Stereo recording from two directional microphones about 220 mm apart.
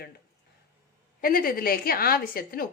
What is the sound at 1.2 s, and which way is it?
A woman's voice, 40° left (ahead or behind).